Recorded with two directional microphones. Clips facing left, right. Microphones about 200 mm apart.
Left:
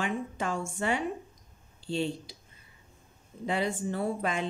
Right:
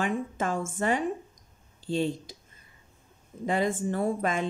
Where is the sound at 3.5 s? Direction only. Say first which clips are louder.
Right 3 dB; 50° right (ahead or behind).